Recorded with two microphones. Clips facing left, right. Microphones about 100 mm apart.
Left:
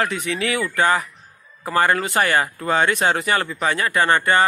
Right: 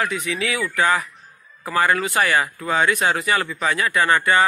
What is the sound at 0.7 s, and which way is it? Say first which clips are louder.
A man's voice: even; 25° left (ahead or behind).